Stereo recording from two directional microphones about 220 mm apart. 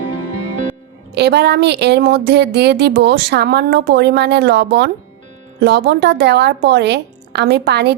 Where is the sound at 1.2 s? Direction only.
50° right (ahead or behind).